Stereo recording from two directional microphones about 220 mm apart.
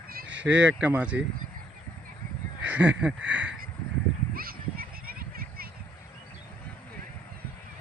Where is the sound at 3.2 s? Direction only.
5° right (ahead or behind).